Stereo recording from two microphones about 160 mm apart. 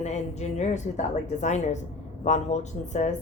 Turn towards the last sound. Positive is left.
turn(degrees=45)  # may be behind; listen again after turning